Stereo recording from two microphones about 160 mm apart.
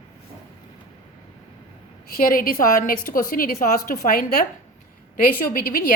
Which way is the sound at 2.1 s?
65° left (ahead or behind).